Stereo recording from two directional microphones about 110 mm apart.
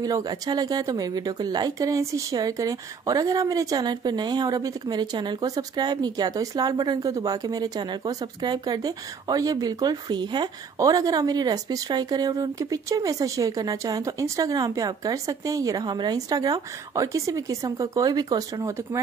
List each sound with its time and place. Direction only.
0.0 s speech: 35° right (ahead or behind)